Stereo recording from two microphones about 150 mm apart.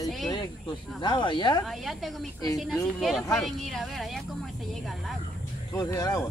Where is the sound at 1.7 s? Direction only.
Centre (ahead or behind).